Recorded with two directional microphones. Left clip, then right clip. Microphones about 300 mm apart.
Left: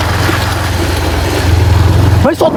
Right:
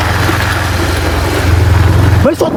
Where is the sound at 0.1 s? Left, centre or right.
Centre.